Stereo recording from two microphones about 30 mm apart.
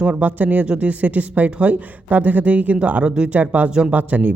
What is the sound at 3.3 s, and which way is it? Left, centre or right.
Speech, right.